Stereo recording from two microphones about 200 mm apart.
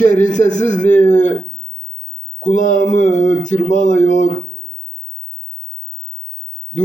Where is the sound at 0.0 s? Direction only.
40° left (ahead or behind).